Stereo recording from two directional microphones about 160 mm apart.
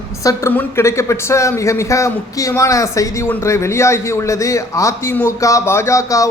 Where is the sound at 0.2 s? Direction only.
20° left (ahead or behind).